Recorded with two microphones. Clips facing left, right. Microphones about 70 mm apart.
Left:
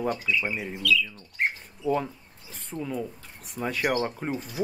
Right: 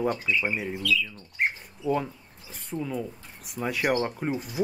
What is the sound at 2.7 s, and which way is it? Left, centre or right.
Speech, centre.